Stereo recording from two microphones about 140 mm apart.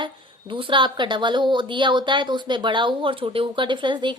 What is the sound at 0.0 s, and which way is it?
A woman's voice, 35° right (ahead or behind).